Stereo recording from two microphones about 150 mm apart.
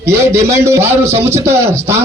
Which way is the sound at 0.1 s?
20° right (ahead or behind).